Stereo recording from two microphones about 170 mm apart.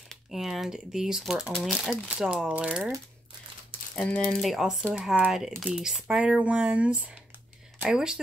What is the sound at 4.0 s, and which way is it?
Speech, 5° left (ahead or behind).